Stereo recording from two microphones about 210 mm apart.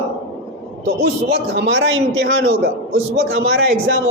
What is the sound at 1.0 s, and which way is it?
A man's voice, 55° right (ahead or behind).